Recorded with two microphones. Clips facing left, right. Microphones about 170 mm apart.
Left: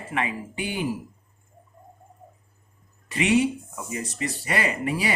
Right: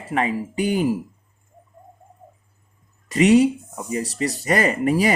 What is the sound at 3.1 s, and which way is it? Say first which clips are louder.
Speech: right 7 dB; 40° right (ahead or behind).